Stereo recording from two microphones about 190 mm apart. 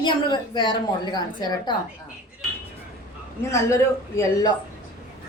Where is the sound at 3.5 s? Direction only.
15° left (ahead or behind).